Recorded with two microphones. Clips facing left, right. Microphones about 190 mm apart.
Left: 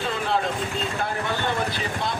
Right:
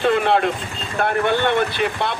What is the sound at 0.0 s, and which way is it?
Speech, 65° right (ahead or behind).